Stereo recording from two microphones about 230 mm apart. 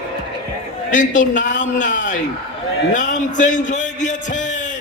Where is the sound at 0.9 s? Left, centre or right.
Left.